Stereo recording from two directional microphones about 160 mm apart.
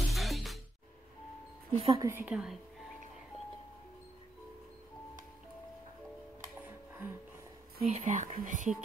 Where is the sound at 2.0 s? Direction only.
10° right (ahead or behind).